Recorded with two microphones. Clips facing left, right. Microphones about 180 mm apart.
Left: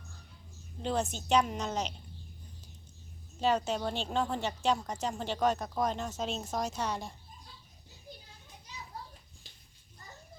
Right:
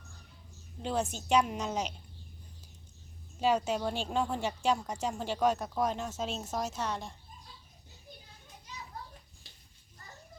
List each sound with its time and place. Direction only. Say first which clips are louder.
0.8 s a woman's voice: even; 5° right (ahead or behind)
3.4 s a woman's voice: right 1 dB; 10° right (ahead or behind)